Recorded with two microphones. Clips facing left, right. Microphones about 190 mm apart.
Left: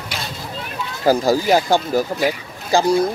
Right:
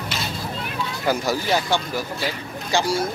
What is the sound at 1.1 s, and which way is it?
Speech, 35° left (ahead or behind).